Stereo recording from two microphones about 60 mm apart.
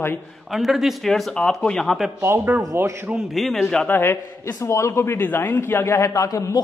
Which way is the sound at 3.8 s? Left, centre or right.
Left.